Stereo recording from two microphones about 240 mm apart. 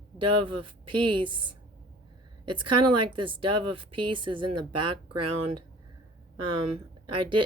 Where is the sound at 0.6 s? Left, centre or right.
Right.